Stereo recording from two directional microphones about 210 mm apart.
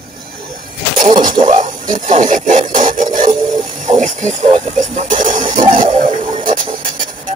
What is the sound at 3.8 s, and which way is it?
Music, 35° right (ahead or behind).